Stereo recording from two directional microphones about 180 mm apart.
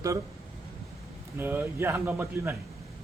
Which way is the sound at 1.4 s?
10° right (ahead or behind).